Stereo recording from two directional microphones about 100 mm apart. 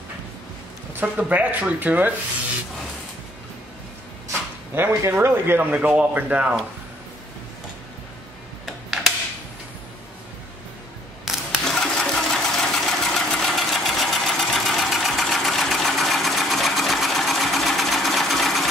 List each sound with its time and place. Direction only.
0.9 s speech: 15° right (ahead or behind)
4.7 s speech: 25° right (ahead or behind)
5.8 s speech: 10° right (ahead or behind)
8.6 s tick-tock: 5° right (ahead or behind)
11.2 s sewing machine: 5° left (ahead or behind)